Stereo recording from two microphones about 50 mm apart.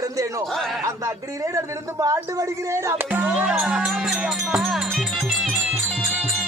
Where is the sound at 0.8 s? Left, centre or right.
Right.